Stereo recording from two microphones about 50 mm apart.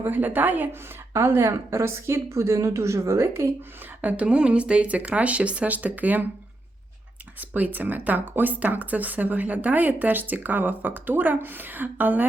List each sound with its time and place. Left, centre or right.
0.0 s speech: right
1.1 s speech: right
4.0 s speech: right
7.3 s speech: right